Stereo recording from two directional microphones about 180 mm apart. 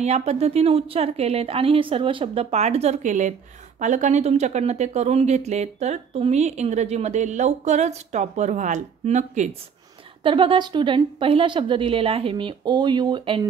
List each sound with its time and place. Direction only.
0.0 s speech: 35° right (ahead or behind)
10.2 s a woman's voice: 30° right (ahead or behind)